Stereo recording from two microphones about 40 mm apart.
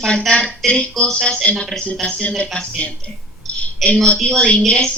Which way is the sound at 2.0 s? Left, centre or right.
Left.